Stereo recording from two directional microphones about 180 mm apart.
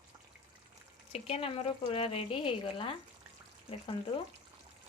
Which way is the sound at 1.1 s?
35° left (ahead or behind).